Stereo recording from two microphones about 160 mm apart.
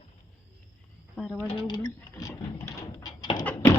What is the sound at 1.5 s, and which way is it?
Speech, 30° left (ahead or behind).